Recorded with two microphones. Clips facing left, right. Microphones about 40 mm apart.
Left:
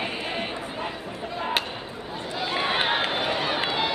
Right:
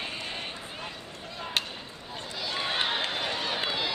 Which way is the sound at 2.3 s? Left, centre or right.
Left.